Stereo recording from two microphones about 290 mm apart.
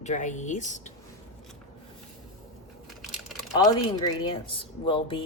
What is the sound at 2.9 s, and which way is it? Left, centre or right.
Crushing, centre.